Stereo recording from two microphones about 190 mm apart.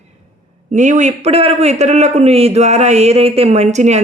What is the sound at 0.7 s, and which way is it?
A man's voice, 40° right (ahead or behind).